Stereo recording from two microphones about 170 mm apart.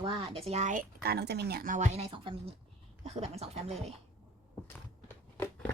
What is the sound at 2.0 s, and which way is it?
A woman's voice, 30° right (ahead or behind).